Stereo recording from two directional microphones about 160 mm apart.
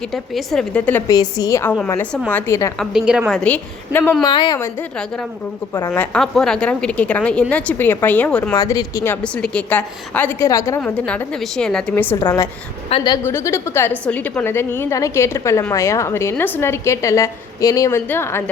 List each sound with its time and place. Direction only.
0.1 s a woman's voice: 5° left (ahead or behind)
1.1 s a woman's voice: 25° left (ahead or behind)
2.7 s a woman's voice: 5° right (ahead or behind)
4.2 s a woman's voice: 25° left (ahead or behind)
5.7 s a woman's voice: 10° left (ahead or behind)
8.5 s a woman's voice: 20° left (ahead or behind)
9.2 s a woman's voice: 5° left (ahead or behind)
10.8 s a woman's voice: 5° left (ahead or behind)
12.9 s a woman's voice: 35° left (ahead or behind)
13.2 s a woman's voice: 15° left (ahead or behind)